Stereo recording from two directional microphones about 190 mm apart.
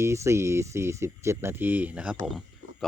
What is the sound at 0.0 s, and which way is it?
Speech, 15° right (ahead or behind).